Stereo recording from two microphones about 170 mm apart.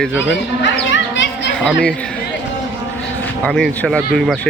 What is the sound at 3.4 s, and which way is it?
Speech, 5° left (ahead or behind).